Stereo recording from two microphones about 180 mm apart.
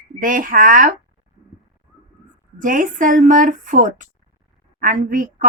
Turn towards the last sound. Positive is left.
turn(degrees=-50)  # may be behind; listen again after turning